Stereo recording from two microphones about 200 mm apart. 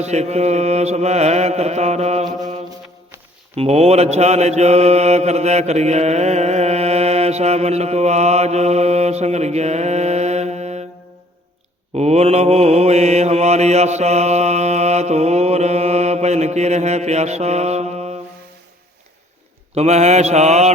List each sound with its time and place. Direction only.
0.0 s mantra: 35° right (ahead or behind)
3.5 s mantra: 30° right (ahead or behind)
11.9 s mantra: 35° right (ahead or behind)
19.7 s mantra: 35° right (ahead or behind)